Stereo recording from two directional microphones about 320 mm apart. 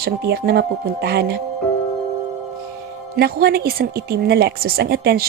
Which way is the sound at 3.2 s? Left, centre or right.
Right.